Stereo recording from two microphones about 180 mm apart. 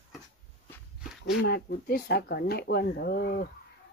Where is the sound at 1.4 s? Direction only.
55° left (ahead or behind).